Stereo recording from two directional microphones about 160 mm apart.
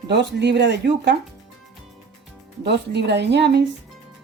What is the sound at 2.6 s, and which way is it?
Speech, 90° right.